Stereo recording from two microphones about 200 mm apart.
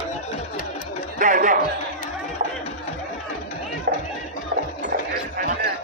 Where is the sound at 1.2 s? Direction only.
40° right (ahead or behind).